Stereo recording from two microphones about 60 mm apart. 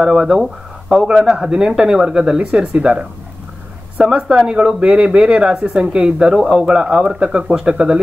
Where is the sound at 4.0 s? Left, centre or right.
Centre.